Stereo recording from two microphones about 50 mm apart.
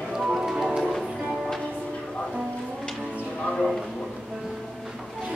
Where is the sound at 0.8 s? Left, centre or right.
Centre.